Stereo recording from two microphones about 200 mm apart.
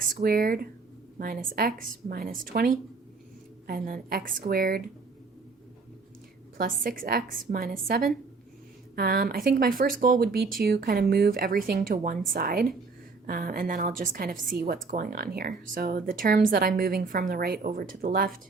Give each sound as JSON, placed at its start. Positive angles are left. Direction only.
{"t": 0.1, "sound": "a woman's voice", "side_deg": -50}
{"t": 6.6, "sound": "a woman's voice", "side_deg": -45}